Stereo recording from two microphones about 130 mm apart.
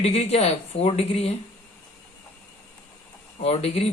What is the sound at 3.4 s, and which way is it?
Speech, 50° left (ahead or behind).